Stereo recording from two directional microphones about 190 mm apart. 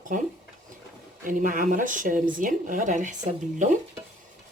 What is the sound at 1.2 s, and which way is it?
Speech, 45° right (ahead or behind).